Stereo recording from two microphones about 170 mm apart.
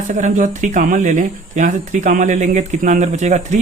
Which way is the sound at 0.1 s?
45° right (ahead or behind).